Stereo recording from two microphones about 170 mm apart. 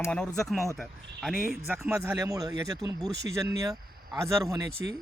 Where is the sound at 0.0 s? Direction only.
5° left (ahead or behind).